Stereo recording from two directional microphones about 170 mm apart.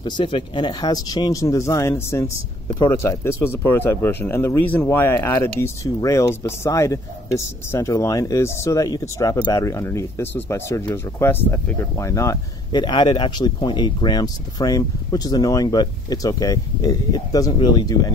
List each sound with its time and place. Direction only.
0.0 s speech: 30° left (ahead or behind)